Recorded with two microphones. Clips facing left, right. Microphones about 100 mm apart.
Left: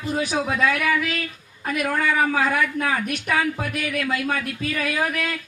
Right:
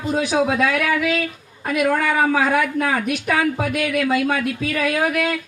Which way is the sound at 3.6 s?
70° right (ahead or behind).